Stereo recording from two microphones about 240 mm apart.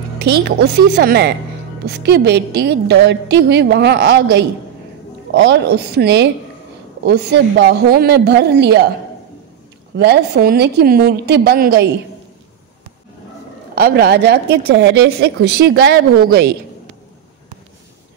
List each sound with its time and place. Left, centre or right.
0.2 s a woman's voice: right
9.9 s a woman's voice: right
13.7 s speech: right